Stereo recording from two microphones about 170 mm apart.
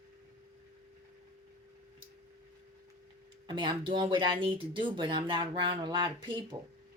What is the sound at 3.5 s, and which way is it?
Speech, 30° right (ahead or behind).